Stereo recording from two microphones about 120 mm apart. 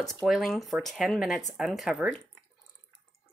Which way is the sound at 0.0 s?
Centre (ahead or behind).